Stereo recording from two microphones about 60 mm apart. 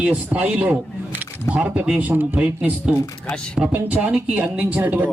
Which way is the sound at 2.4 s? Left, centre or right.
Centre.